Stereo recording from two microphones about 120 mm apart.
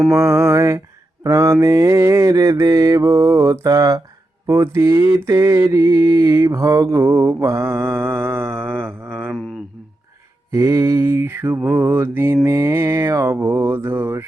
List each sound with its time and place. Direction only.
0.1 s mantra: 20° right (ahead or behind)
10.5 s mantra: 25° right (ahead or behind)